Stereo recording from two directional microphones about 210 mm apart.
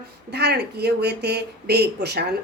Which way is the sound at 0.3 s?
50° right (ahead or behind).